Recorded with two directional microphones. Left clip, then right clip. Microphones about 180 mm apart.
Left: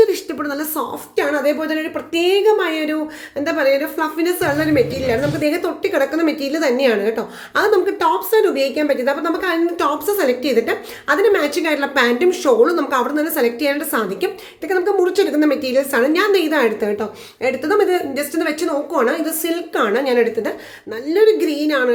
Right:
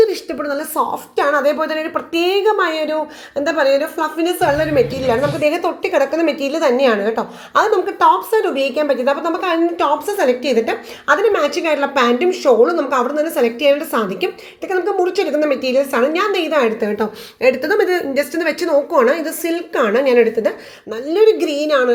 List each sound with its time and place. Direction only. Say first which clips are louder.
0.0 s a woman's voice: even; centre (ahead or behind)
17.0 s a woman's voice: right 5 dB; 10° right (ahead or behind)